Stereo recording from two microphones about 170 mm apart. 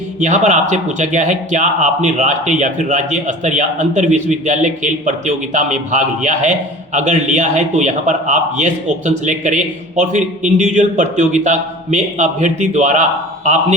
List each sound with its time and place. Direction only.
0.2 s speech: 45° right (ahead or behind)